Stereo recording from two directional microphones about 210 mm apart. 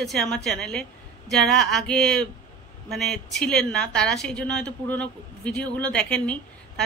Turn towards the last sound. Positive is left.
turn(degrees=5)  # may be behind; listen again after turning